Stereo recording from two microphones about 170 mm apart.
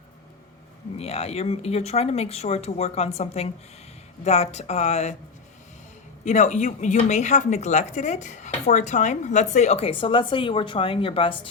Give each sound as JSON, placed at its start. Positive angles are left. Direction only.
{"t": 0.9, "sound": "speech", "side_deg": 40}
{"t": 6.2, "sound": "speech", "side_deg": 45}